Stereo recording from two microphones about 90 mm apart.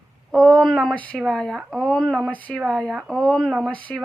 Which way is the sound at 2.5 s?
5° left (ahead or behind).